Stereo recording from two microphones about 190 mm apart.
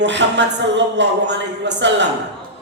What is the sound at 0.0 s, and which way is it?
Speech, 65° right (ahead or behind).